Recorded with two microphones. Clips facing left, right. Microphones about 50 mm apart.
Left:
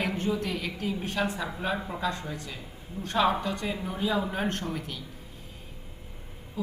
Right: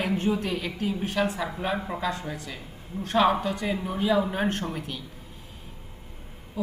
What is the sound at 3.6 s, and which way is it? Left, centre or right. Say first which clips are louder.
Speech: right 4 dB; centre.